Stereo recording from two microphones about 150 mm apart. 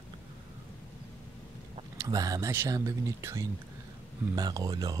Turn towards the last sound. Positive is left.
turn(degrees=-25)  # may be behind; listen again after turning